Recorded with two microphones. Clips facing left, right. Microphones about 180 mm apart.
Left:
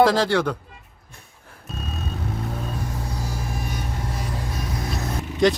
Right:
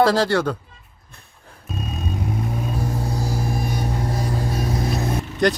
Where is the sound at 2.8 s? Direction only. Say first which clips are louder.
Right 6 dB; 35° right (ahead or behind).